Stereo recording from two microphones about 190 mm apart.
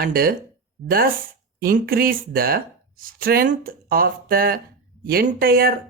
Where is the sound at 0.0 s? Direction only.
50° right (ahead or behind).